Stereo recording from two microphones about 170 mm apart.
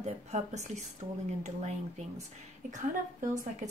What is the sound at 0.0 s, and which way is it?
Speech, 45° right (ahead or behind).